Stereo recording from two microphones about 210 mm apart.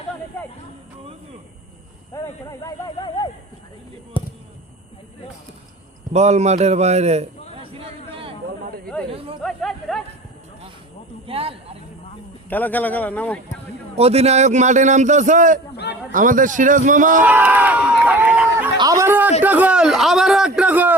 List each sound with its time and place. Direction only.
2.1 s a man's voice: 15° left (ahead or behind)
4.1 s speech: 25° left (ahead or behind)
6.1 s a man's voice: 30° right (ahead or behind)
7.6 s a sound: 25° right (ahead or behind)
9.4 s chatter: centre (ahead or behind)
11.3 s speech: 25° right (ahead or behind)
12.5 s a man's voice: 10° left (ahead or behind)
13.9 s a man's voice: 30° right (ahead or behind)
15.7 s a sound: 50° left (ahead or behind)
16.1 s a man's voice: 40° right (ahead or behind)
17.2 s a man's voice: 10° right (ahead or behind)